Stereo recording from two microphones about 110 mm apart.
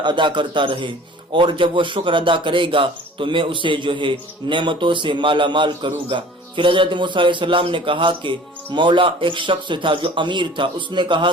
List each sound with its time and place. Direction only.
0.0 s speech: 45° right (ahead or behind)